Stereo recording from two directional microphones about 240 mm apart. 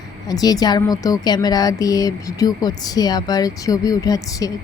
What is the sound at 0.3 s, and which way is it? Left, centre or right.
A woman's voice, centre.